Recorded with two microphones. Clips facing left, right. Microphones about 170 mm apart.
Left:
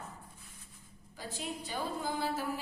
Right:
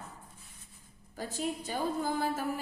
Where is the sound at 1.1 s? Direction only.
45° right (ahead or behind).